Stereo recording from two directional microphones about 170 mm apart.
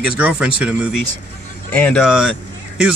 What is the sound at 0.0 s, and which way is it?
Speech, 5° right (ahead or behind).